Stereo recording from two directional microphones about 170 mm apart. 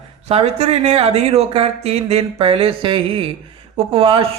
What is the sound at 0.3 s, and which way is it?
Speech, 40° right (ahead or behind).